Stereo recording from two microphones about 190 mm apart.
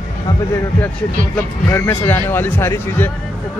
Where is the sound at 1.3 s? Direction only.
10° left (ahead or behind).